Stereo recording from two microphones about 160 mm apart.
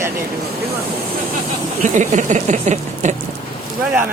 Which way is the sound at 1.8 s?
50° right (ahead or behind).